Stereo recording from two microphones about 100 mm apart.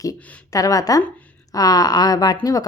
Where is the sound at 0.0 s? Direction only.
35° left (ahead or behind).